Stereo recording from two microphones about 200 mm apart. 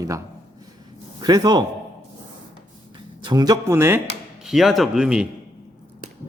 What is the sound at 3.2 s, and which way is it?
Speech, 20° right (ahead or behind).